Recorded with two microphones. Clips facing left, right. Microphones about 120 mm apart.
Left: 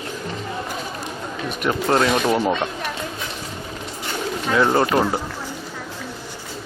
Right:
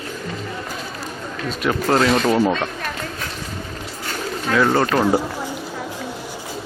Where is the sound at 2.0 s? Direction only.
15° left (ahead or behind).